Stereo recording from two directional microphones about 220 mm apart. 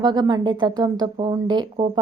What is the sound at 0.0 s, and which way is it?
A woman's voice, 20° right (ahead or behind).